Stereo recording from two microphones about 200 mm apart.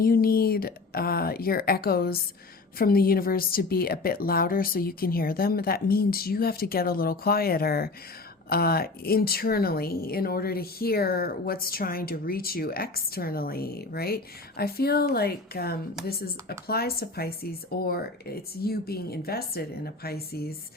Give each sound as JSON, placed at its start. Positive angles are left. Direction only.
{"t": 0.0, "sound": "speech", "side_deg": 45}